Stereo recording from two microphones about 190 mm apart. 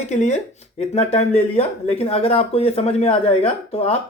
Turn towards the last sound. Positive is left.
turn(degrees=30)  # may be behind; listen again after turning